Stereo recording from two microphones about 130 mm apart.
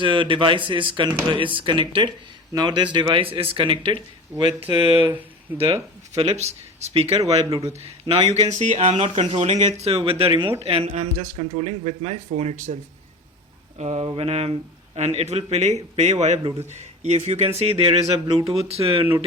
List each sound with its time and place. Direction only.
0.0 s speech: 40° right (ahead or behind)
6.1 s speech: 55° right (ahead or behind)
8.3 s speech: 60° right (ahead or behind)
13.7 s speech: 55° right (ahead or behind)